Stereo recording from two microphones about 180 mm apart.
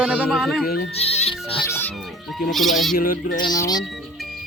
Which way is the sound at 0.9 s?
35° left (ahead or behind).